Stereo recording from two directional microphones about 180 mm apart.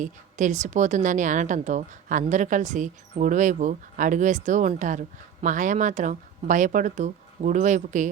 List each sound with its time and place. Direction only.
0.0 s speech: 45° right (ahead or behind)